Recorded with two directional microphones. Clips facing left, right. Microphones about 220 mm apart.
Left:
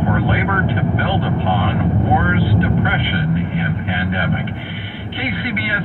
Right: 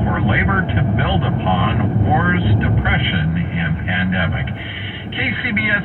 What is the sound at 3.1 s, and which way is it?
Speech, 40° left (ahead or behind).